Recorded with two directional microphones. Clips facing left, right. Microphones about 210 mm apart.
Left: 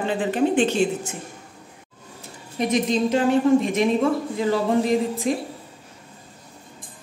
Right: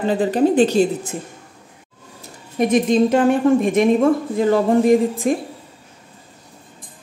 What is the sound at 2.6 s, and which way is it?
A woman's voice, 50° right (ahead or behind).